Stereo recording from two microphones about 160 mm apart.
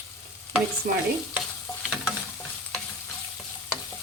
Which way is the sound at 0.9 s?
60° right (ahead or behind).